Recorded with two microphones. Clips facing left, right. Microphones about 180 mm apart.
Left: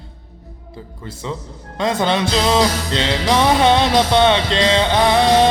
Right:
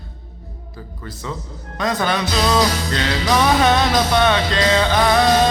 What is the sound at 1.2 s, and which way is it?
Music, 20° left (ahead or behind).